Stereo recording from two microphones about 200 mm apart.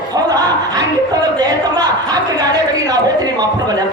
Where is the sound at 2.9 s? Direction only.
20° right (ahead or behind).